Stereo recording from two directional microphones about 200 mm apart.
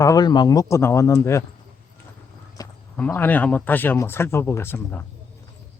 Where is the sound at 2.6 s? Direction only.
20° left (ahead or behind).